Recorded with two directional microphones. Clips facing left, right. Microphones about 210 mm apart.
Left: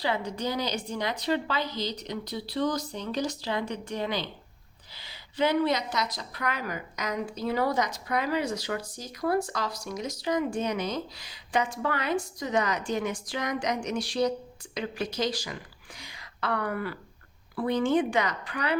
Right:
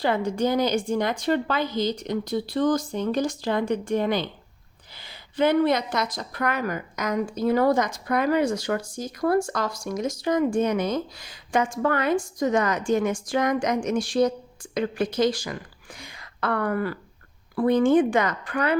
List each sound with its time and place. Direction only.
0.0 s a woman's voice: 50° right (ahead or behind)